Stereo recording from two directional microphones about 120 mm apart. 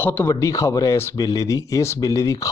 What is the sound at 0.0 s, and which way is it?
Speech, 15° left (ahead or behind).